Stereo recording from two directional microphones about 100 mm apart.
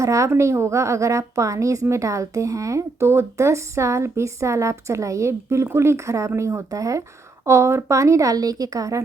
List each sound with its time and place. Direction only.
0.0 s a woman's voice: 30° right (ahead or behind)